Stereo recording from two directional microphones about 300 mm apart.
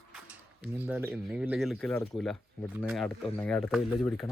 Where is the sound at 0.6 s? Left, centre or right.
Centre.